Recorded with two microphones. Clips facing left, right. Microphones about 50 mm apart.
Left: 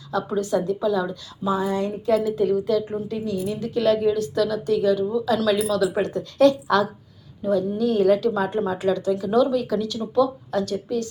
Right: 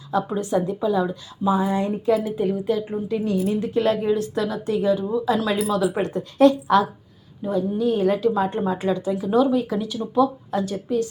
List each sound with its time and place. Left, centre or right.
0.1 s a woman's voice: right